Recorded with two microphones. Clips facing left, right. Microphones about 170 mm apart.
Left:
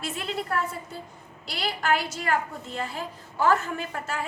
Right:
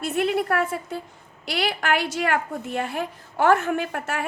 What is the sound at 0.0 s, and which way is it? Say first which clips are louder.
A woman's voice: right 9 dB; 65° right (ahead or behind).